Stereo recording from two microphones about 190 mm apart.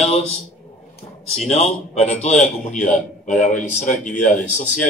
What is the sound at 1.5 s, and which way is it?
A man's voice, 35° left (ahead or behind).